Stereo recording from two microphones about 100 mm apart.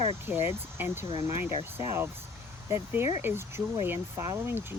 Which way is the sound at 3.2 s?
25° right (ahead or behind).